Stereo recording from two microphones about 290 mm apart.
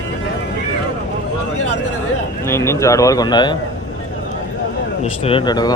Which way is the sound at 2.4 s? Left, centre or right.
Centre.